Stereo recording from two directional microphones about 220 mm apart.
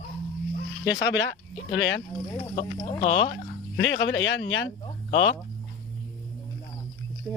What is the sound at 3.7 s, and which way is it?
Speech, 55° left (ahead or behind).